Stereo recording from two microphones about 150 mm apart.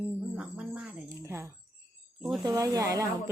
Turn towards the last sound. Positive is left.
turn(degrees=-25)  # may be behind; listen again after turning